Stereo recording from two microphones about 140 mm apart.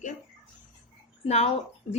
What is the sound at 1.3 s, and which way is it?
Speech, 50° left (ahead or behind).